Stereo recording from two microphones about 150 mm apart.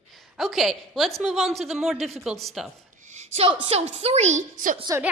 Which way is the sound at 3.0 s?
50° right (ahead or behind).